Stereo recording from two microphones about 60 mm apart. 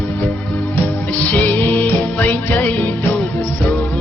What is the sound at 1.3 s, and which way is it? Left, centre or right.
Music, left.